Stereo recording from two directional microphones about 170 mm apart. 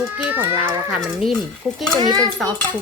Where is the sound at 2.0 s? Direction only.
25° right (ahead or behind).